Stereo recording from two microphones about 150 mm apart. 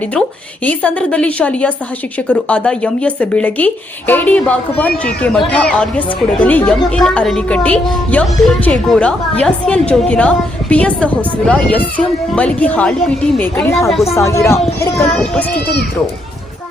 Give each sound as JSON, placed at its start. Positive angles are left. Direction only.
{"t": 0.1, "sound": "speech", "side_deg": 10}